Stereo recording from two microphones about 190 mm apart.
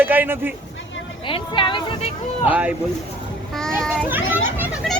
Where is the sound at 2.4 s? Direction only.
5° right (ahead or behind).